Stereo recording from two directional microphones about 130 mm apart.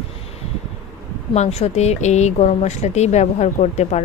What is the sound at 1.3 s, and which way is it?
A woman's voice, 55° left (ahead or behind).